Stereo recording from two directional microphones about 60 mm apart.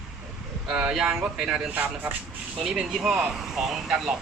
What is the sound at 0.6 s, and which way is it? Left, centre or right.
Speech, centre.